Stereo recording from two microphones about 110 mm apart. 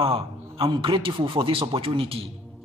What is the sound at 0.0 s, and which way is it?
A man's voice, 55° right (ahead or behind).